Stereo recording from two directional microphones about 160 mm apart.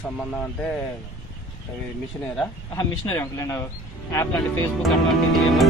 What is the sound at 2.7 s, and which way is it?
Speech, 20° left (ahead or behind).